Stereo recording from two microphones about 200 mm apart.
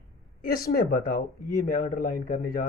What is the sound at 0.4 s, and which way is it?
Speech, 50° left (ahead or behind).